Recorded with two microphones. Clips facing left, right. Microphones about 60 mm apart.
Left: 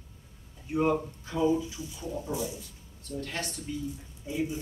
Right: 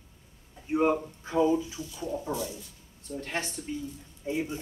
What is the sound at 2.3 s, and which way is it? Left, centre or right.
Speech, right.